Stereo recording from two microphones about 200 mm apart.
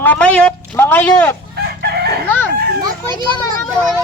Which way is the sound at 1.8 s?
55° right (ahead or behind).